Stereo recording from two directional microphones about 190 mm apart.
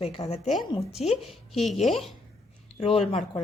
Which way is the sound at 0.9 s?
Centre (ahead or behind).